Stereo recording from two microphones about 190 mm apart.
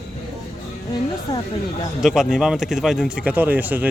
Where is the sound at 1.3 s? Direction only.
15° left (ahead or behind).